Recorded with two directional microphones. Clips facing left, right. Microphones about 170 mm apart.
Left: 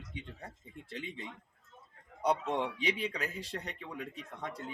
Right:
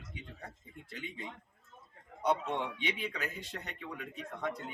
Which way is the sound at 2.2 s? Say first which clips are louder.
Left 1 dB; 35° left (ahead or behind).